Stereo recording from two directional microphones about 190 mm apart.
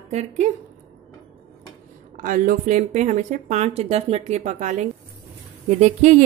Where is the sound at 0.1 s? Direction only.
35° right (ahead or behind).